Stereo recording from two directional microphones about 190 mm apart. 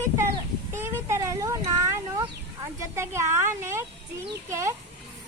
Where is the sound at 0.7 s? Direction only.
15° right (ahead or behind).